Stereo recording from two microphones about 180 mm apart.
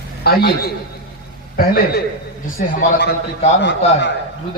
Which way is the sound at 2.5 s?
70° left (ahead or behind).